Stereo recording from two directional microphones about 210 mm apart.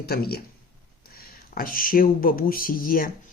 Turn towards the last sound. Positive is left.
turn(degrees=45)  # may be behind; listen again after turning